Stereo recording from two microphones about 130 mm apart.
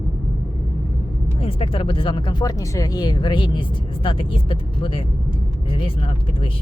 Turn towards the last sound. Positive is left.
turn(degrees=45)  # may be behind; listen again after turning